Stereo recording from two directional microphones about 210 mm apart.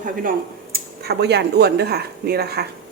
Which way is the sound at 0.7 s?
50° right (ahead or behind).